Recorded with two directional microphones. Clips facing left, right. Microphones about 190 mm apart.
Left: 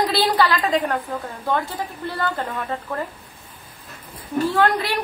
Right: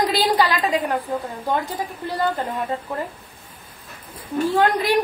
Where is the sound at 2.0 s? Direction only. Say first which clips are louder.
Right 3 dB; 15° right (ahead or behind).